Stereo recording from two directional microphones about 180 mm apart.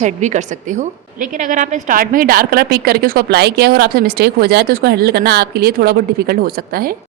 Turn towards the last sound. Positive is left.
turn(degrees=-55)  # may be behind; listen again after turning